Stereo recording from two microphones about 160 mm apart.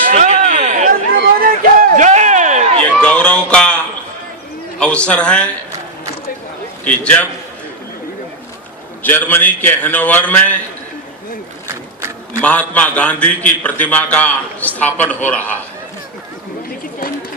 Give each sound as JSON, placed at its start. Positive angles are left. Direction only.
{"t": 0.0, "sound": "a sound", "side_deg": -50}
{"t": 1.1, "sound": "a sound", "side_deg": -65}
{"t": 2.9, "sound": "music", "side_deg": 5}
{"t": 4.8, "sound": "a man's voice", "side_deg": 5}
{"t": 6.8, "sound": "a man's voice", "side_deg": 10}
{"t": 9.0, "sound": "a man's voice", "side_deg": 10}
{"t": 12.4, "sound": "a man's voice", "side_deg": 10}